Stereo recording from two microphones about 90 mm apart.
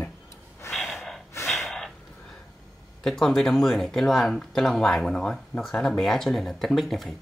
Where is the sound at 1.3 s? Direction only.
30° left (ahead or behind).